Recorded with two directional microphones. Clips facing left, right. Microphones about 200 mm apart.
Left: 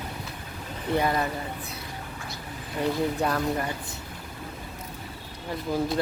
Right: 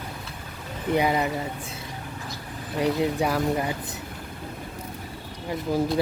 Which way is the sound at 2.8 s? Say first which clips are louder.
Right 2 dB; 10° right (ahead or behind).